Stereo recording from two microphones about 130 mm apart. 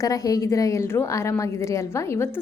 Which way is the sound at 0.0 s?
25° left (ahead or behind).